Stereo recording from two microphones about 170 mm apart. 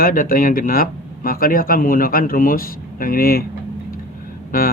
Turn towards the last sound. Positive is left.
turn(degrees=55)  # may be behind; listen again after turning